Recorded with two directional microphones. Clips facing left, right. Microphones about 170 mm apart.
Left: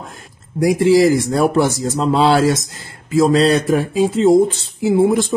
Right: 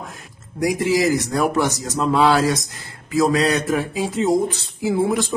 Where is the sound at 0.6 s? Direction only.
30° left (ahead or behind).